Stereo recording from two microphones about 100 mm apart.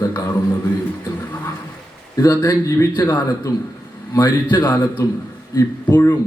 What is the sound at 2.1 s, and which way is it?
A man's voice, 30° left (ahead or behind).